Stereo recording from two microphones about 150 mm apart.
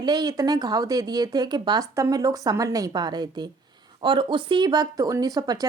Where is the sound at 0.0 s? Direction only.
25° right (ahead or behind).